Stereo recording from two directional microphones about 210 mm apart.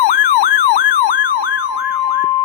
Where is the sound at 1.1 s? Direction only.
40° left (ahead or behind).